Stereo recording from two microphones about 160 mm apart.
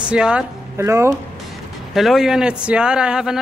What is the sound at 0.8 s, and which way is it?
Speech, 15° right (ahead or behind).